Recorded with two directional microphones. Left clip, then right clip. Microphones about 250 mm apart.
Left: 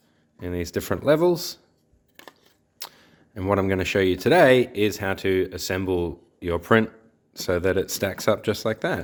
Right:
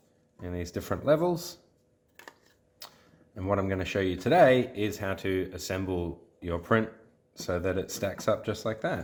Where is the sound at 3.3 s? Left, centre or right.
Left.